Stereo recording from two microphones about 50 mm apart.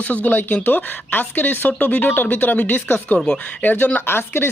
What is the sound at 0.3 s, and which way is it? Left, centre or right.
Speech, left.